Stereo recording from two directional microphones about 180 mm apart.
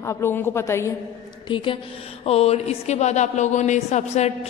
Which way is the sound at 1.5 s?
30° left (ahead or behind).